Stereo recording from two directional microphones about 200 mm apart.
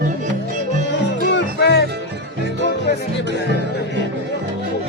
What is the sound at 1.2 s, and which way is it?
Music, 60° left (ahead or behind).